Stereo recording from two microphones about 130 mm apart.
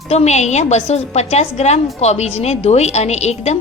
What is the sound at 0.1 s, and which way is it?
A woman's voice, 60° left (ahead or behind).